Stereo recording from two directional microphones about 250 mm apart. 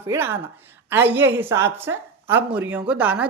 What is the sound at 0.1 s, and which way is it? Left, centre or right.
A man's voice, centre.